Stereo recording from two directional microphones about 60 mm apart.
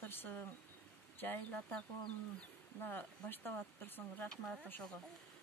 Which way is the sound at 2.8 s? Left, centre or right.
Left.